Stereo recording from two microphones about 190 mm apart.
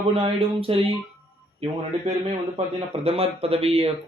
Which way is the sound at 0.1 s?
30° right (ahead or behind).